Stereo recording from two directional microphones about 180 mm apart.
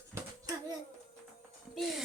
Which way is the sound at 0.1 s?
20° right (ahead or behind).